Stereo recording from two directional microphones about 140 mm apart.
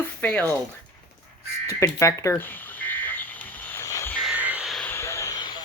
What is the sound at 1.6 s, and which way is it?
Speech, 20° left (ahead or behind).